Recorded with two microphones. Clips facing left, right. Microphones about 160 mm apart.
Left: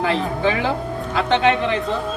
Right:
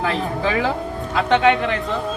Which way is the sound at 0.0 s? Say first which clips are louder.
Left 2 dB; 30° left (ahead or behind).